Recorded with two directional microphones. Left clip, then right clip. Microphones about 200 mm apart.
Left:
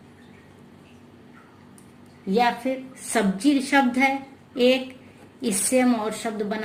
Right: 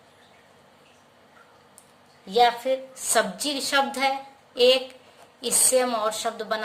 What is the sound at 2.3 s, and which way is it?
A woman's voice, 55° right (ahead or behind).